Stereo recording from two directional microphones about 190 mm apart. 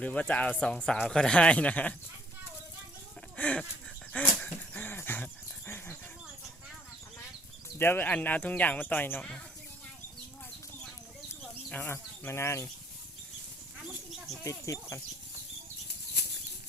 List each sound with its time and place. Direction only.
0.0 s speech: 5° left (ahead or behind)
3.3 s a sound: 5° left (ahead or behind)
7.8 s speech: 10° left (ahead or behind)
11.7 s speech: 10° left (ahead or behind)
14.4 s speech: 15° left (ahead or behind)